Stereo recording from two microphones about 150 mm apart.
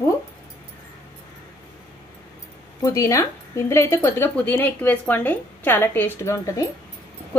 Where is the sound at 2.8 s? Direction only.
20° left (ahead or behind).